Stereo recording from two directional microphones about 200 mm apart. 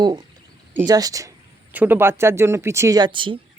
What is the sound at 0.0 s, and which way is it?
Speech, 20° right (ahead or behind).